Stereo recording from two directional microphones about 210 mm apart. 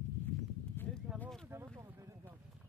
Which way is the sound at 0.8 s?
10° left (ahead or behind).